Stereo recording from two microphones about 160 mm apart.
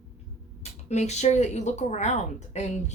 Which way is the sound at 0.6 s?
45° left (ahead or behind).